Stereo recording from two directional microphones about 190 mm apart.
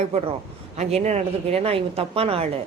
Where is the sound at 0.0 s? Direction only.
35° right (ahead or behind).